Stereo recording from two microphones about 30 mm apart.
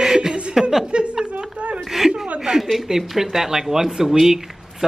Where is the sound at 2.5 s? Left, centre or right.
Right.